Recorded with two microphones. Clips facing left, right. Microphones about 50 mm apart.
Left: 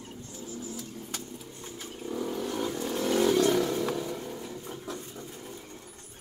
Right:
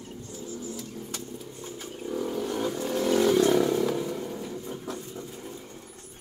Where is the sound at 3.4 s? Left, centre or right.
Centre.